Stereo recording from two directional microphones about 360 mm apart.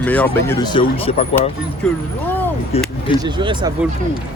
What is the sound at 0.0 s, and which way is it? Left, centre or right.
Speech, centre.